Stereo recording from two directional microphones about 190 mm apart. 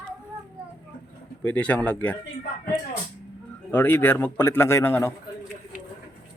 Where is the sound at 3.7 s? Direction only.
10° left (ahead or behind).